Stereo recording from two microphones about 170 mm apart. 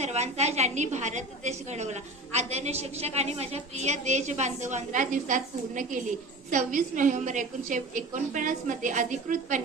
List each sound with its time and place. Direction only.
0.0 s a woman's voice: 40° right (ahead or behind)